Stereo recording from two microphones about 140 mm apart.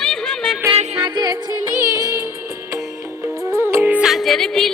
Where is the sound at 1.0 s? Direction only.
30° right (ahead or behind).